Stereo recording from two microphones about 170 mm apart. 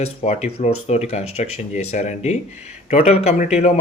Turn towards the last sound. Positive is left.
turn(degrees=40)  # may be behind; listen again after turning